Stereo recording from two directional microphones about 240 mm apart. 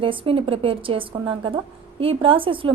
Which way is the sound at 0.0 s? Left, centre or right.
Right.